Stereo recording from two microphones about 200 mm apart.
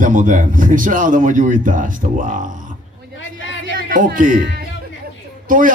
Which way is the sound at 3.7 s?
45° right (ahead or behind).